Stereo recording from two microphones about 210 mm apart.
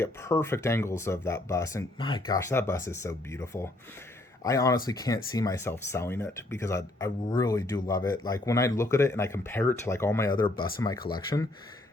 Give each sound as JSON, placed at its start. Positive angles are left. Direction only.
{"t": 0.0, "sound": "speech", "side_deg": 10}